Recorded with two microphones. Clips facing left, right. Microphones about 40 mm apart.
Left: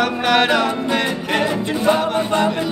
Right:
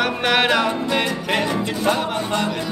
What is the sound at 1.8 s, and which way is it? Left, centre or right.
Music, centre.